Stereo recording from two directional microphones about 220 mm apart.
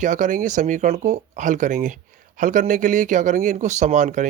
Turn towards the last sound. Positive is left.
turn(degrees=-35)  # may be behind; listen again after turning